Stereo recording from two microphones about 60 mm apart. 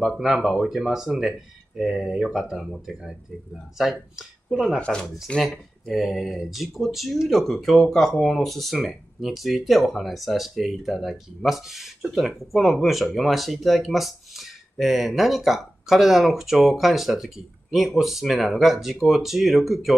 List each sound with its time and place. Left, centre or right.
0.0 s speech: centre
4.5 s speech: centre
4.7 s speech: centre
5.4 s speech: centre